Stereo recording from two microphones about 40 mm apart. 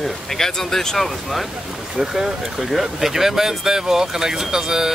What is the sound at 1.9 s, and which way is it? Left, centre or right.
Speech, centre.